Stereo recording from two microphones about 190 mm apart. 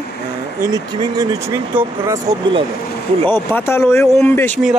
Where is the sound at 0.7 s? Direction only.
20° right (ahead or behind).